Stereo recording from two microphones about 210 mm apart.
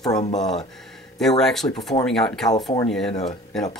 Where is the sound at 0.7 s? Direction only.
Centre (ahead or behind).